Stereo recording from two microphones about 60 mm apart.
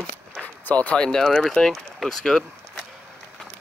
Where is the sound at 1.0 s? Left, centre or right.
Centre.